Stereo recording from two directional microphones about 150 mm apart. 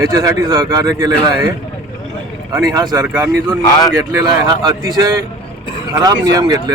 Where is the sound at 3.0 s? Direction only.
10° right (ahead or behind).